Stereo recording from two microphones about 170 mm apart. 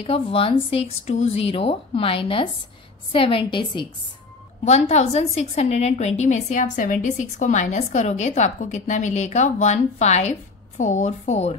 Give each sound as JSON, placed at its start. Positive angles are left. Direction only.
{"t": 0.0, "sound": "a woman's voice", "side_deg": 35}